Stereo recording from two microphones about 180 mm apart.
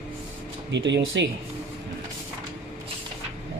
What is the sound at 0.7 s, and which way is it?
Speech, 80° right.